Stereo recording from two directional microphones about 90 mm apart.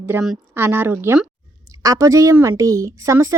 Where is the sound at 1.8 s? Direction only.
35° right (ahead or behind).